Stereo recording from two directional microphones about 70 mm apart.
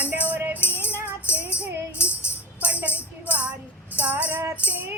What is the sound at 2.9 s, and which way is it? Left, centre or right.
Speech, right.